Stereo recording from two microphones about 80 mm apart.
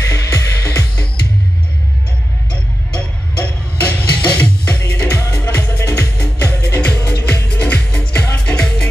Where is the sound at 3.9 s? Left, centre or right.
Centre.